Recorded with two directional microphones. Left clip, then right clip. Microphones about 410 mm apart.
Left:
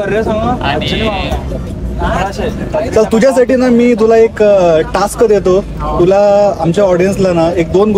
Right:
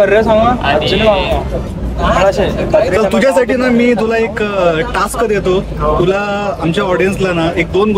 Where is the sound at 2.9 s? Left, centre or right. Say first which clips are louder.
Left 2 dB; centre.